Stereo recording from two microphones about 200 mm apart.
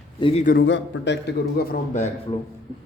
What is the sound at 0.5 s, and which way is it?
A man's voice, 65° left (ahead or behind).